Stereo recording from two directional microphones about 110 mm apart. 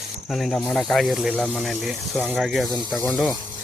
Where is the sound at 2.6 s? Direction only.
35° left (ahead or behind).